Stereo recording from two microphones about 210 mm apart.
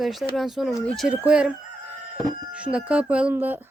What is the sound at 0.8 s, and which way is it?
Chicken, centre (ahead or behind).